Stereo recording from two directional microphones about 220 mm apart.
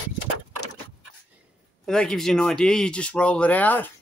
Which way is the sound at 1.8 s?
Centre (ahead or behind).